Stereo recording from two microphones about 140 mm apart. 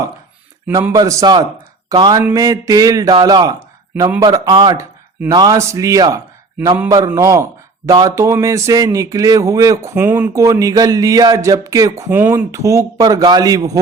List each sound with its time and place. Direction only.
0.9 s speech: 25° right (ahead or behind)